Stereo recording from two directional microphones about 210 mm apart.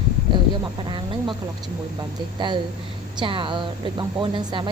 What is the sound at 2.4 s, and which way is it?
Speech, 20° right (ahead or behind).